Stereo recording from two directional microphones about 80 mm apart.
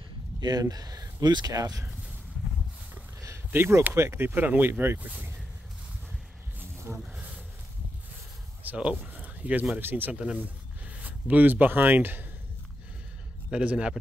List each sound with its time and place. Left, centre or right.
0.4 s speech: right
3.2 s a sound: right
3.8 s speech: right
7.0 s bee: centre
8.6 s speech: centre
10.1 s speech: centre
13.5 s a man's voice: centre